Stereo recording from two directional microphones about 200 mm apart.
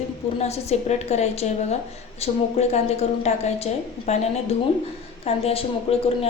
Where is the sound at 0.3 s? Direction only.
30° left (ahead or behind).